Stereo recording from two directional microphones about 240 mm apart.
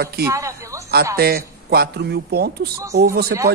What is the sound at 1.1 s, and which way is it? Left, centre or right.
A man's voice, right.